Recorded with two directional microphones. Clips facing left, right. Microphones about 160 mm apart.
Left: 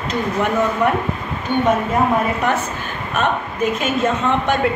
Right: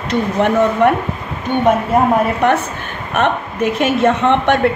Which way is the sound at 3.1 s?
65° right (ahead or behind).